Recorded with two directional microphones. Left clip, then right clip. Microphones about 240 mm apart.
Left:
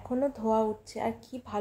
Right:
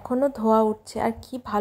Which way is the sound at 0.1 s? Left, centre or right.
Right.